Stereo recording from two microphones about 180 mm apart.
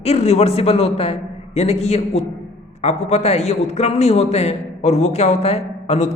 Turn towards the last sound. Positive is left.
turn(degrees=35)  # may be behind; listen again after turning